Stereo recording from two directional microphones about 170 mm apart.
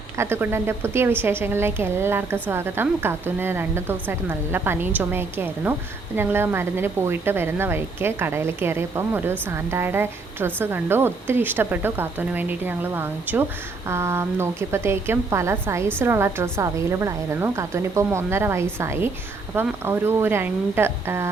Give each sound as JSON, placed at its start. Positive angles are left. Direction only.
{"t": 0.2, "sound": "a woman's voice", "side_deg": -15}